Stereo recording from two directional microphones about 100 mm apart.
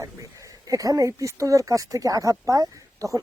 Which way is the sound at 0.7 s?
35° right (ahead or behind).